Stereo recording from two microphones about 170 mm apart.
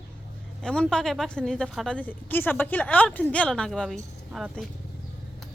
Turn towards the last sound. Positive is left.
turn(degrees=0)  # may be behind; listen again after turning